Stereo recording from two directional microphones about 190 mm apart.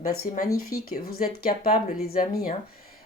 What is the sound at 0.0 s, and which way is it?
Speech, 50° left (ahead or behind).